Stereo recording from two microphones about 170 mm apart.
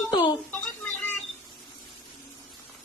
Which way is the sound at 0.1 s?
25° left (ahead or behind).